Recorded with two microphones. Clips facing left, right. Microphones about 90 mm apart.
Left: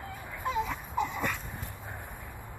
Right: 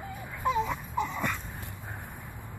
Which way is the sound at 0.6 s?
5° left (ahead or behind).